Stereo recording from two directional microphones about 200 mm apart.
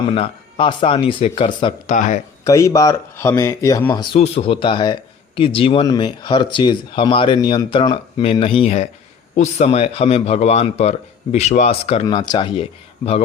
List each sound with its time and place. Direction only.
0.1 s speech: 25° left (ahead or behind)
1.9 s speech: 40° left (ahead or behind)
2.4 s speech: 15° left (ahead or behind); by 12.0 s 30° left (ahead or behind)
12.0 s speech: 20° left (ahead or behind)